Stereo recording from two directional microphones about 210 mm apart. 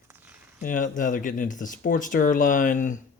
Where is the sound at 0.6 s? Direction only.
40° left (ahead or behind).